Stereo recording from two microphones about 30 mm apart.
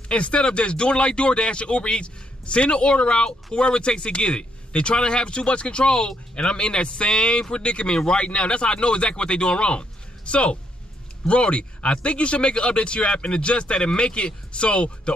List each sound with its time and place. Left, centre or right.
0.1 s speech: left